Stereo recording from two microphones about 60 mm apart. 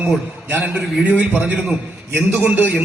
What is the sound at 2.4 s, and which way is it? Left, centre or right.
Speech, right.